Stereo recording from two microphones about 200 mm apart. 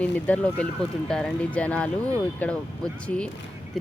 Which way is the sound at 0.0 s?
5° left (ahead or behind).